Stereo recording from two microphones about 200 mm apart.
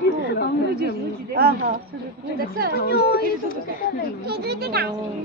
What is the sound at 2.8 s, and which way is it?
Speech, 50° left (ahead or behind).